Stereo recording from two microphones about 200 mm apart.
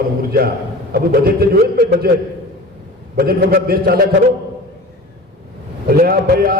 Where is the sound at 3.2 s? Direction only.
50° right (ahead or behind).